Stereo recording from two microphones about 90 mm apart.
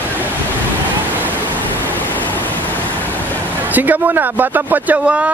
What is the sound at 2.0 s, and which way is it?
Pink noise, 20° left (ahead or behind).